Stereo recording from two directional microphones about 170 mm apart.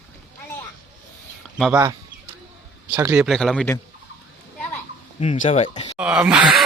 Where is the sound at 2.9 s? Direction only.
10° right (ahead or behind).